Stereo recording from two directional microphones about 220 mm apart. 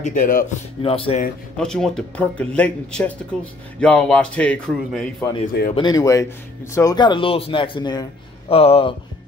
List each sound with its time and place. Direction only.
0.0 s speech: 35° left (ahead or behind)
0.8 s speech: 25° left (ahead or behind)
1.6 s speech: centre (ahead or behind)
5.5 s speech: 40° left (ahead or behind)
5.8 s speech: 15° left (ahead or behind)